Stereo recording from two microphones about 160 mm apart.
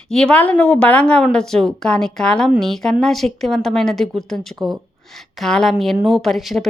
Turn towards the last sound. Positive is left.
turn(degrees=0)  # may be behind; listen again after turning